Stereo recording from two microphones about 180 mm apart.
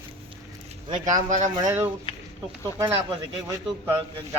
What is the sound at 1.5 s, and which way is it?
Speech, 15° right (ahead or behind).